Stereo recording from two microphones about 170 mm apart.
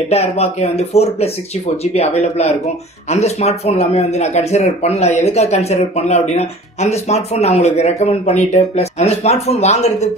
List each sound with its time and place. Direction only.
0.1 s speech: 40° left (ahead or behind)